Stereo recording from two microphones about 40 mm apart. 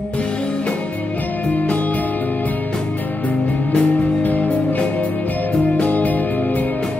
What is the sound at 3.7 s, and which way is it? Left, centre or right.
Music, left.